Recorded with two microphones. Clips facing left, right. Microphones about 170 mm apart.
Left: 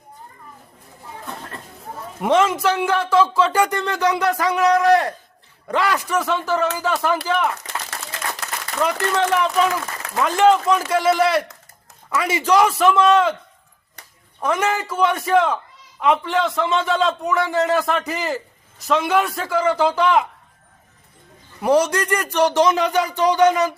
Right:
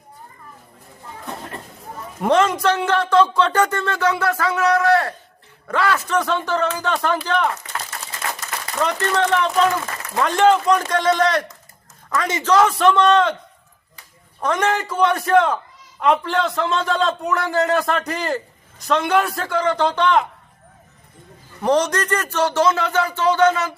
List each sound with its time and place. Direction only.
2.2 s speech: centre (ahead or behind)
6.1 s a man's voice: 5° left (ahead or behind)
8.8 s a man's voice: 10° left (ahead or behind)
14.4 s a man's voice: 5° left (ahead or behind)
21.6 s speech: 10° left (ahead or behind)